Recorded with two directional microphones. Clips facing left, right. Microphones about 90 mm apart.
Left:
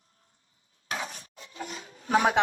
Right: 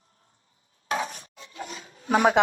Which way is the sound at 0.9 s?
30° right (ahead or behind).